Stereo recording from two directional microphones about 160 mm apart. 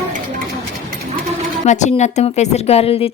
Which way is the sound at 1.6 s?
45° left (ahead or behind).